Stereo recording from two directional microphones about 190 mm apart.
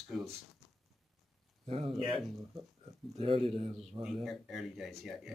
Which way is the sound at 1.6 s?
30° right (ahead or behind).